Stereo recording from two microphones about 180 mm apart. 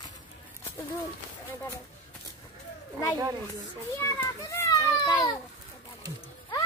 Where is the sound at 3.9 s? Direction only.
15° left (ahead or behind).